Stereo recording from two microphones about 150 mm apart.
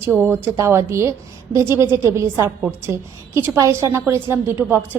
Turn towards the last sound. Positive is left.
turn(degrees=-15)  # may be behind; listen again after turning